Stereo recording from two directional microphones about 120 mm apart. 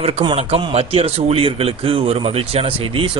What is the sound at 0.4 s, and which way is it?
A man's voice, 55° right (ahead or behind).